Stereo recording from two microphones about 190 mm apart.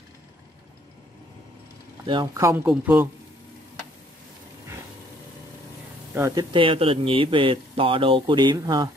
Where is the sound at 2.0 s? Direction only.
20° right (ahead or behind).